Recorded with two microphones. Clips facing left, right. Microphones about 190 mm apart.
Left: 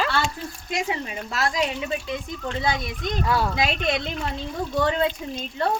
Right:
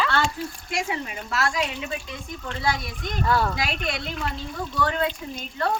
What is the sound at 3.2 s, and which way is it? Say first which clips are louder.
Speech: right 1 dB; 10° left (ahead or behind).